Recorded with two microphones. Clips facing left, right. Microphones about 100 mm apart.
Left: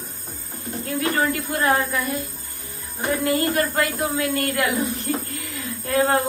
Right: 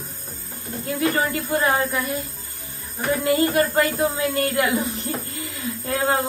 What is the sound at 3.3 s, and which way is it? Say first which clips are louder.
A woman's voice: right 4 dB; 25° right (ahead or behind).